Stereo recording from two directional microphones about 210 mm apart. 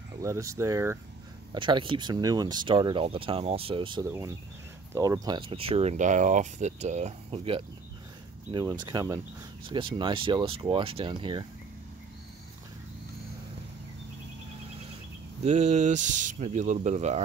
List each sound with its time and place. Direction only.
0.2 s speech: 15° right (ahead or behind)
15.4 s speech: 35° right (ahead or behind)